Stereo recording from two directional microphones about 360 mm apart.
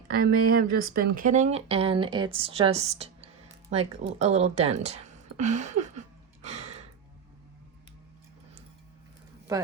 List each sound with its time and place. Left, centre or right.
0.2 s speech: right